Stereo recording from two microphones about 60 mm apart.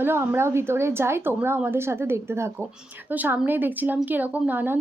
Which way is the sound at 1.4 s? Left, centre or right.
Right.